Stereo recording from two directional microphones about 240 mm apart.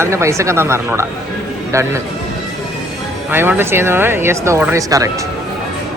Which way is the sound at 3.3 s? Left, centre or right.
Centre.